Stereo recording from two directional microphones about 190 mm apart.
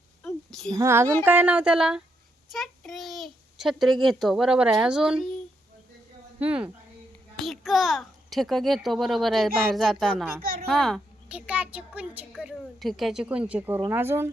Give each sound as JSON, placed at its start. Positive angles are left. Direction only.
{"t": 0.2, "sound": "a sound", "side_deg": 5}
{"t": 0.7, "sound": "a woman's voice", "side_deg": -15}
{"t": 6.4, "sound": "a woman's voice", "side_deg": -5}